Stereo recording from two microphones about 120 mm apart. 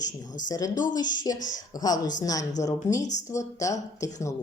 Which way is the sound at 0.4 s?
30° left (ahead or behind).